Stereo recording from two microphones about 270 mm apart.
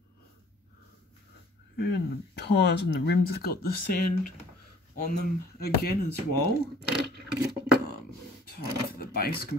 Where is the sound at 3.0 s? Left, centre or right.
Left.